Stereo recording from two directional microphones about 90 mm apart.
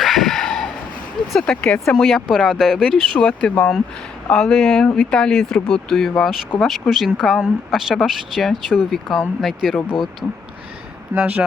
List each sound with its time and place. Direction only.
0.0 s a sound: centre (ahead or behind)
1.3 s speech: 5° left (ahead or behind)
10.2 s speech: 10° left (ahead or behind)
11.1 s speech: 15° right (ahead or behind)